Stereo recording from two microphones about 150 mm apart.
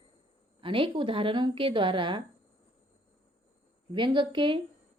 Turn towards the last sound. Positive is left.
turn(degrees=-35)  # may be behind; listen again after turning